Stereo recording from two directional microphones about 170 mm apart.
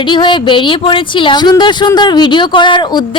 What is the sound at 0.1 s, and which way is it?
Speech, 25° left (ahead or behind).